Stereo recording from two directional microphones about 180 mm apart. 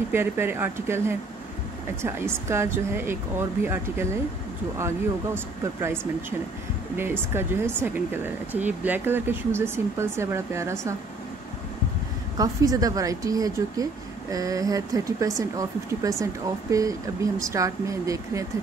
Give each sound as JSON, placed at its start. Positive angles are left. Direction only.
{"t": 0.1, "sound": "speech", "side_deg": -10}
{"t": 7.0, "sound": "speech", "side_deg": -10}
{"t": 12.4, "sound": "speech", "side_deg": -20}